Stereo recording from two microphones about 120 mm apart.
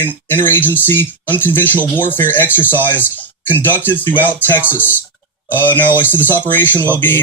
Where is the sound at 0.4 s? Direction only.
15° left (ahead or behind).